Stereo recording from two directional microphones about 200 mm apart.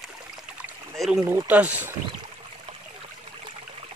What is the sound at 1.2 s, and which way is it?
Speech, 10° right (ahead or behind).